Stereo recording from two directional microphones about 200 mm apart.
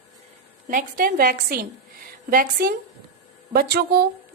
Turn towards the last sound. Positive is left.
turn(degrees=-55)  # may be behind; listen again after turning